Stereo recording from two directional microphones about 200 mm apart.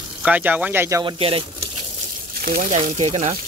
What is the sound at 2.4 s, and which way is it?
Speech, 45° right (ahead or behind).